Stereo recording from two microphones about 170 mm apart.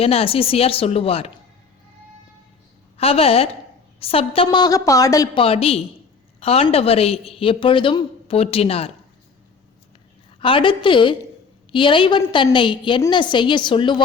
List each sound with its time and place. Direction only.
0.0 s a woman's voice: 35° left (ahead or behind)
3.0 s a woman's voice: 35° left (ahead or behind)
5.4 s a woman's voice: 35° left (ahead or behind)
10.4 s a woman's voice: 30° left (ahead or behind)